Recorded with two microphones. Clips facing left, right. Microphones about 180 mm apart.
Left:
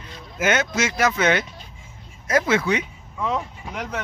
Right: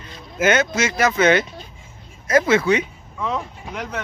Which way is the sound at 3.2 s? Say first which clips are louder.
Even; 10° left (ahead or behind).